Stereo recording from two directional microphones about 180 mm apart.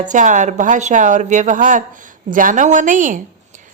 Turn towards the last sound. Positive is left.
turn(degrees=-45)  # may be behind; listen again after turning